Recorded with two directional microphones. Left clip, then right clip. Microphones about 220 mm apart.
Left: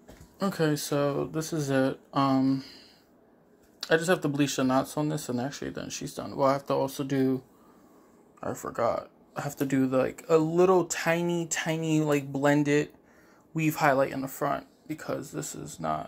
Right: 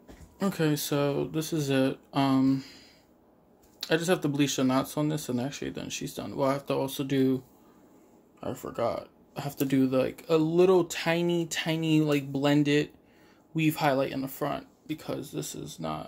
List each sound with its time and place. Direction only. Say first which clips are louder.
0.4 s speech: left 1 dB; 15° right (ahead or behind)
8.4 s speech: left 2 dB; 10° right (ahead or behind)